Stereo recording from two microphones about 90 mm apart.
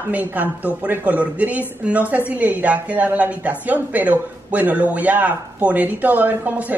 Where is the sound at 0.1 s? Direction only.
20° right (ahead or behind).